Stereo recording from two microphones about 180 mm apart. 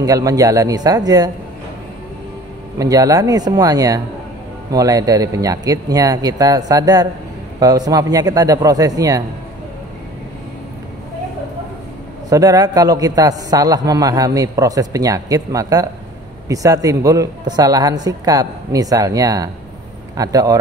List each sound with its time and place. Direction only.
0.0 s a man's voice: 20° right (ahead or behind)
2.8 s a man's voice: 20° right (ahead or behind)
12.3 s a man's voice: 20° right (ahead or behind)